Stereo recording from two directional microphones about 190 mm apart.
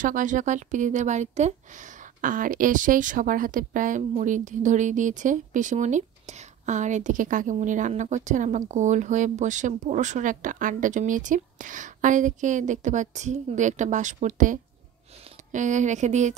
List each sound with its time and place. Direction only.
0.0 s speech: 40° right (ahead or behind)